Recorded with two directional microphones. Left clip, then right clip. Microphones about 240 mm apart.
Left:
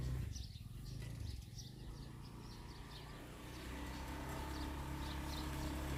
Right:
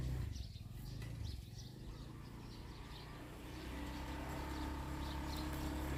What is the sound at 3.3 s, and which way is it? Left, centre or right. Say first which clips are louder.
Vehicle: right 1 dB; centre.